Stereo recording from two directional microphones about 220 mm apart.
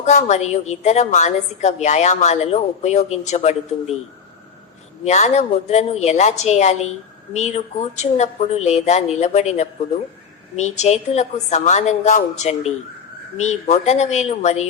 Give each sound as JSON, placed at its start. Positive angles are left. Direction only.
{"t": 0.0, "sound": "a woman's voice", "side_deg": 35}
{"t": 5.0, "sound": "a woman's voice", "side_deg": 30}